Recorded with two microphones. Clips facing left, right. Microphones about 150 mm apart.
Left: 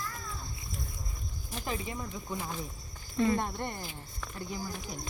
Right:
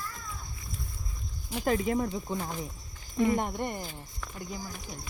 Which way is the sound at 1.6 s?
60° right (ahead or behind).